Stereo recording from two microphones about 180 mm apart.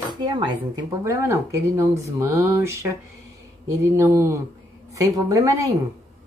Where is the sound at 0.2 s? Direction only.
25° right (ahead or behind).